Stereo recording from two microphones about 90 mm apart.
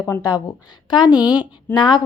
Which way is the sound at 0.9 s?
50° left (ahead or behind).